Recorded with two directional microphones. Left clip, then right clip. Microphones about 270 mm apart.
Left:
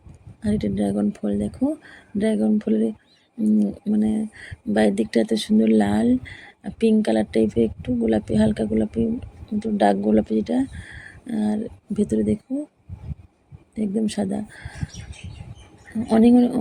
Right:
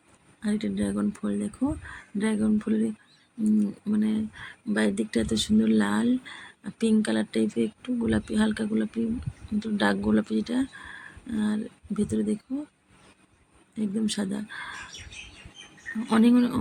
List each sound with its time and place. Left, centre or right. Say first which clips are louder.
0.4 s speech: left 6 dB; centre
13.7 s speech: left 5 dB; centre
16.0 s speech: left 6 dB; centre